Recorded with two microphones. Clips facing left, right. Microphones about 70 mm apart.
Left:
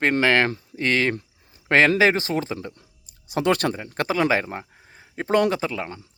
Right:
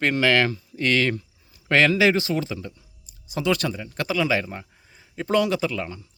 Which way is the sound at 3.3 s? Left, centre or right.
Left.